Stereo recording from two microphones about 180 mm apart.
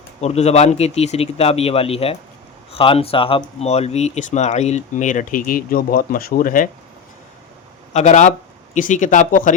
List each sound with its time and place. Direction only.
0.2 s speech: 35° left (ahead or behind)
7.9 s speech: 40° left (ahead or behind)